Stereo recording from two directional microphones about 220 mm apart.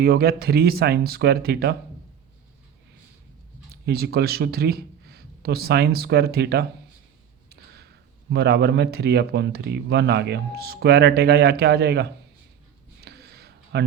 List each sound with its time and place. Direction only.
0.0 s speech: 45° right (ahead or behind)
3.7 s speech: 45° right (ahead or behind)
8.3 s speech: 45° right (ahead or behind)
13.0 s a sound: 45° right (ahead or behind)